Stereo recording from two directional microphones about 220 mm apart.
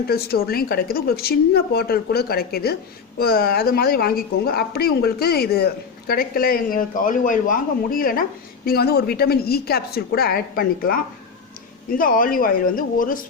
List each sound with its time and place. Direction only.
0.1 s a woman's voice: 45° left (ahead or behind)